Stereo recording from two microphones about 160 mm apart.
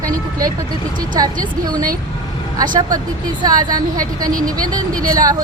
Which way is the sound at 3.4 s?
25° right (ahead or behind).